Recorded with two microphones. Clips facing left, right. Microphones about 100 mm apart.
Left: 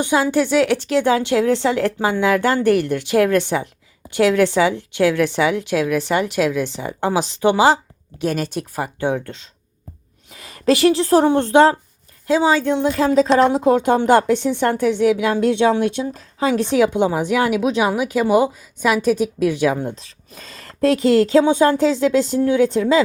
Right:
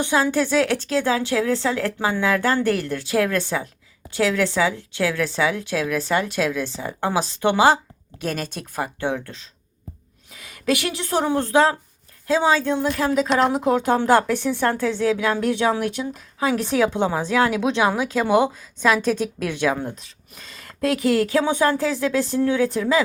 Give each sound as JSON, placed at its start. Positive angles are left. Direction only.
{"t": 0.0, "sound": "speech", "side_deg": 15}
{"t": 10.3, "sound": "a woman's voice", "side_deg": 30}
{"t": 11.3, "sound": "speech", "side_deg": 25}
{"t": 12.3, "sound": "speech", "side_deg": 15}
{"t": 20.4, "sound": "speech", "side_deg": 40}